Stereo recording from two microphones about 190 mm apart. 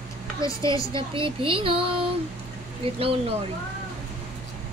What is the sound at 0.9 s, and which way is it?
Speech, 25° right (ahead or behind).